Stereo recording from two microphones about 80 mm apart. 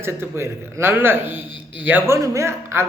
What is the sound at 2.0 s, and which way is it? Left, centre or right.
Speech, right.